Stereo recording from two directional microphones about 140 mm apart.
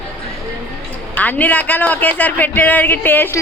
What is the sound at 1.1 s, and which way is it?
A man's voice, 10° left (ahead or behind).